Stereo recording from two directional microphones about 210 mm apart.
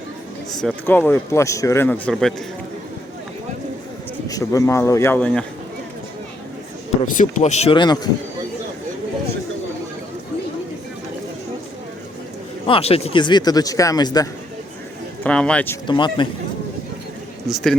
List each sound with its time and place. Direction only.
0.6 s speech: 10° left (ahead or behind)
4.3 s speech: 15° left (ahead or behind)
7.0 s speech: 35° left (ahead or behind); by 8.1 s 20° left (ahead or behind)
12.6 s speech: 25° left (ahead or behind)
15.2 s speech: 5° left (ahead or behind)
15.9 s speech: 20° left (ahead or behind)
17.5 s speech: centre (ahead or behind)